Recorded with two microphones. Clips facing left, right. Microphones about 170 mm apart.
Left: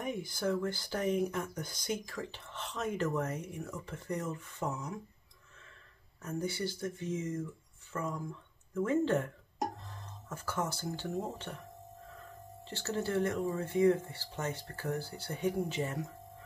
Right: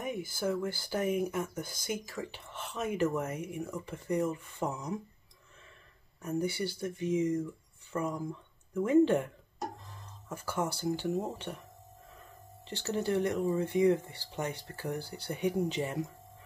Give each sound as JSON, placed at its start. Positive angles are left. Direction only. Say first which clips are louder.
{"t": 0.0, "sound": "speech", "louder": "right 1 dB", "side_deg": -5}
{"t": 6.2, "sound": "speech", "louder": "right 3 dB", "side_deg": -10}
{"t": 12.6, "sound": "speech", "louder": "right 3 dB", "side_deg": -15}